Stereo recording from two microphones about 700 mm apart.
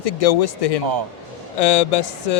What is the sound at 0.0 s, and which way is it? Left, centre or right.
Speech, left.